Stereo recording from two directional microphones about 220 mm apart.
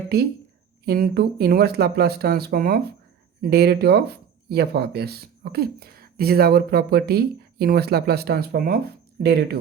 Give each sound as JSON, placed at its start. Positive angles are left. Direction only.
{"t": 0.1, "sound": "speech", "side_deg": -45}